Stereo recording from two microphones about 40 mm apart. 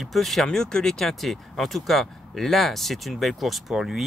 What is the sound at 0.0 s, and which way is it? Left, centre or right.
Speech, centre.